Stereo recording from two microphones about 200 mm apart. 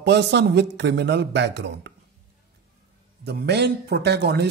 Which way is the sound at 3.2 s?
55° right (ahead or behind).